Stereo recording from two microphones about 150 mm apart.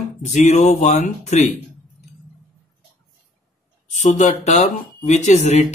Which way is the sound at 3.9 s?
50° left (ahead or behind).